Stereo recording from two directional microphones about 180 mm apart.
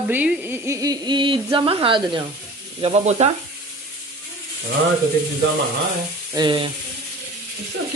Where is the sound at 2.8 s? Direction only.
40° right (ahead or behind).